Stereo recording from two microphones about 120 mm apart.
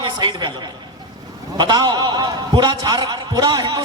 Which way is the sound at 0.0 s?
40° right (ahead or behind).